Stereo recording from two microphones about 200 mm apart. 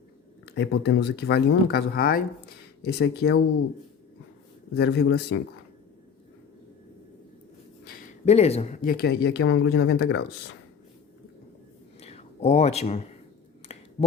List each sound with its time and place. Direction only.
0.4 s speech: 55° left (ahead or behind)
4.7 s speech: 55° left (ahead or behind)
8.2 s speech: 30° left (ahead or behind)
8.8 s speech: 50° left (ahead or behind); by 10.2 s 70° left (ahead or behind)
11.9 s a sound: 30° left (ahead or behind)